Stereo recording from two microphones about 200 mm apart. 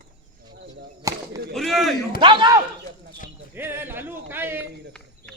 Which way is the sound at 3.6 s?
10° right (ahead or behind).